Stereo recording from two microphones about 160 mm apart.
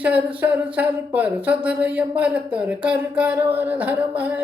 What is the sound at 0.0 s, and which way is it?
A woman's voice, 10° right (ahead or behind).